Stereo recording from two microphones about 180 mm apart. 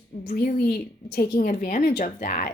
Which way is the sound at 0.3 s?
50° left (ahead or behind).